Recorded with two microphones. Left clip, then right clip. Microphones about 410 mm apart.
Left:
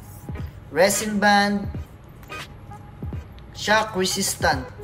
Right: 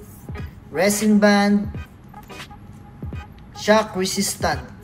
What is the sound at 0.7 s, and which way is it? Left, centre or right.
Speech, centre.